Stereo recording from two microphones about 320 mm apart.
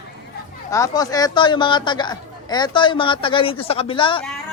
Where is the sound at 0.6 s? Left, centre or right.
Centre.